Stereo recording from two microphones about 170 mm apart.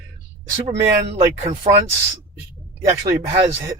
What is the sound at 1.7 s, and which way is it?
Speech, 35° right (ahead or behind).